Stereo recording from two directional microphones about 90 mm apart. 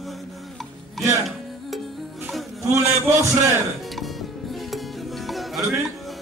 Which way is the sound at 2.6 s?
35° right (ahead or behind).